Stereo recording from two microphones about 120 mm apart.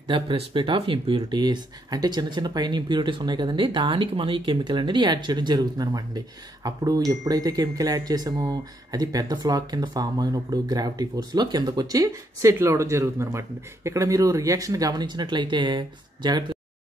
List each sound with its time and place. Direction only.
0.0 s speech: 45° right (ahead or behind)